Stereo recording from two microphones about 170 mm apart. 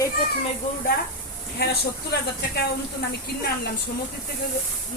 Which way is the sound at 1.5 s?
70° left (ahead or behind).